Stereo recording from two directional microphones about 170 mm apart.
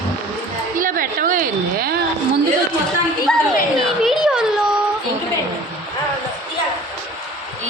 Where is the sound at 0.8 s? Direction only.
55° right (ahead or behind).